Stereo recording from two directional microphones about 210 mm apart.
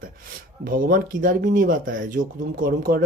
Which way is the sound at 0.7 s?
40° right (ahead or behind).